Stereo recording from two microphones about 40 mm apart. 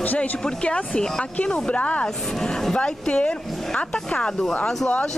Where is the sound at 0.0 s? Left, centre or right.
Left.